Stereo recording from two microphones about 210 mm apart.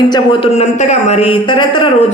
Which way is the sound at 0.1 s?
25° left (ahead or behind).